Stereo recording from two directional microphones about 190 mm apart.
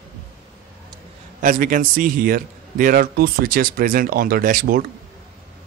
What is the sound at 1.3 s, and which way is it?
A man's voice, 45° right (ahead or behind).